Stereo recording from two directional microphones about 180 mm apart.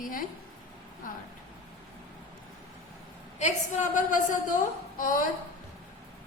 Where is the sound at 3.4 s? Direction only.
45° left (ahead or behind).